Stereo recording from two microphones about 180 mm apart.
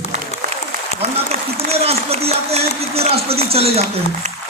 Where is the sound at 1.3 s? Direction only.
35° right (ahead or behind).